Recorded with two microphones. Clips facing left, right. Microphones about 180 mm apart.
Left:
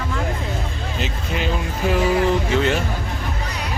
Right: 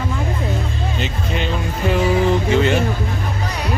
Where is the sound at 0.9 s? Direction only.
Centre (ahead or behind).